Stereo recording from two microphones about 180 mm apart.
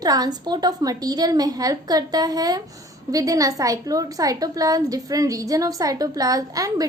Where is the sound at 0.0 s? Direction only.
20° right (ahead or behind).